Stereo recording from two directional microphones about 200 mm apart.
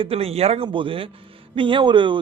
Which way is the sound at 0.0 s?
30° right (ahead or behind).